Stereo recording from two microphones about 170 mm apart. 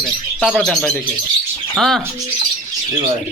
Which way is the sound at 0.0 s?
5° left (ahead or behind).